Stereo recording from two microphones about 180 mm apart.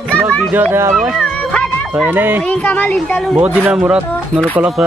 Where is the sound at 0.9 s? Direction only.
Centre (ahead or behind).